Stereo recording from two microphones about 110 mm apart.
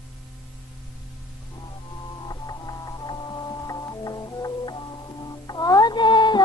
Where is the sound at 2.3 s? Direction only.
35° left (ahead or behind).